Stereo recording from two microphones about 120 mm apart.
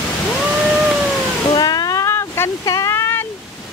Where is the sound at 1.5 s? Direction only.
35° left (ahead or behind).